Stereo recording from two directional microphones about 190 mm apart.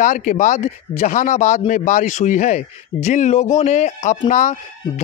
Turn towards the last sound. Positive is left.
turn(degrees=40)  # may be behind; listen again after turning